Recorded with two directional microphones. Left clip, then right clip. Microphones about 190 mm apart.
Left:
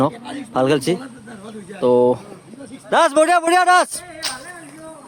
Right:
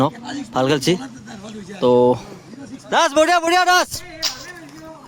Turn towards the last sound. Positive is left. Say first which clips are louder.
# right 2 dB
turn(degrees=-5)  # may be behind; listen again after turning